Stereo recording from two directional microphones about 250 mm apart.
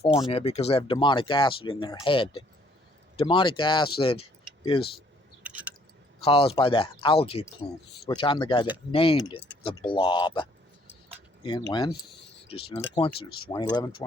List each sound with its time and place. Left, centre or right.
0.3 s speech: left
5.4 s chewing: centre
6.2 s speech: left